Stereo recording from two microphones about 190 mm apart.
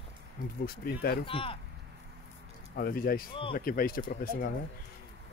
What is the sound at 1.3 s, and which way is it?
Speech, 30° left (ahead or behind).